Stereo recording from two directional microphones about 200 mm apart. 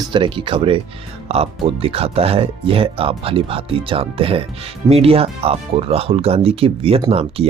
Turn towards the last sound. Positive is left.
turn(degrees=-30)  # may be behind; listen again after turning